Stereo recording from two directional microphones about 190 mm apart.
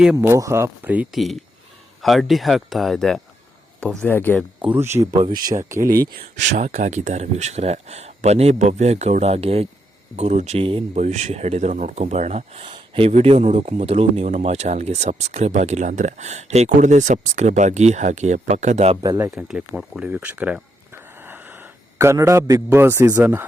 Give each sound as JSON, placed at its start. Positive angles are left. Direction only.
{"t": 0.0, "sound": "a man's voice", "side_deg": -10}
{"t": 4.6, "sound": "a man's voice", "side_deg": -10}
{"t": 5.8, "sound": "speech", "side_deg": -50}
{"t": 19.0, "sound": "a man's voice", "side_deg": -15}
{"t": 19.3, "sound": "speech", "side_deg": -5}
{"t": 21.9, "sound": "a man's voice", "side_deg": -15}